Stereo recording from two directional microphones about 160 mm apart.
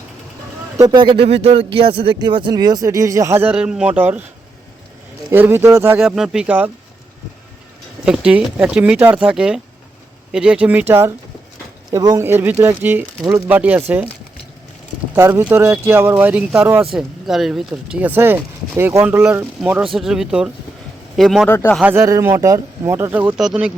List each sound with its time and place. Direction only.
0.8 s speech: 30° right (ahead or behind)
3.5 s speech: 5° right (ahead or behind)
5.3 s speech: 15° right (ahead or behind)
6.0 s speech: 5° right (ahead or behind)
8.0 s speech: 5° right (ahead or behind)
15.1 s speech: 15° right (ahead or behind)
16.8 s speech: centre (ahead or behind)
21.4 s speech: 10° left (ahead or behind)
21.8 s speech: 15° right (ahead or behind)
23.4 s speech: 5° right (ahead or behind)